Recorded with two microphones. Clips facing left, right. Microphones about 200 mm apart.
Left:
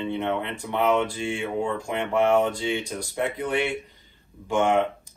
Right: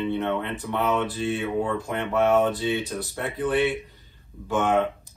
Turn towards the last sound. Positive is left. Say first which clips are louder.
# left 1 dB
turn(degrees=15)  # may be behind; listen again after turning